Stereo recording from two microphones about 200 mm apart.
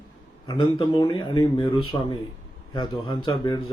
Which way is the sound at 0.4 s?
20° left (ahead or behind).